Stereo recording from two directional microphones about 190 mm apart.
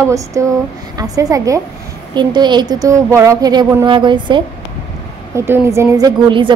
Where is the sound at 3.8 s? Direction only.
25° right (ahead or behind).